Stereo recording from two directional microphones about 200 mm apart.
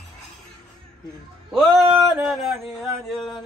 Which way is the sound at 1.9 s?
5° right (ahead or behind).